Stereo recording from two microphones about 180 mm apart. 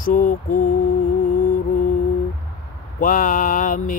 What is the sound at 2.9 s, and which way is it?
Mantra, 50° left (ahead or behind).